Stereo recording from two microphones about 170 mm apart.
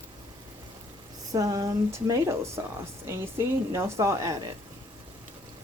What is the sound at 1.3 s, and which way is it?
A woman's voice, 20° right (ahead or behind).